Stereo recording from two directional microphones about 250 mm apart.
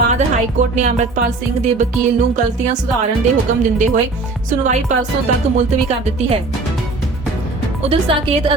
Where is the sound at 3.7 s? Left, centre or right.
Right.